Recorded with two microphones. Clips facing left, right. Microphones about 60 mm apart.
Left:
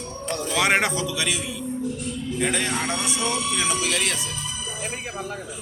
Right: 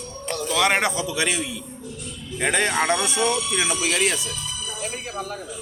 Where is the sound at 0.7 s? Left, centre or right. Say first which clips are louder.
Left 1 dB; centre.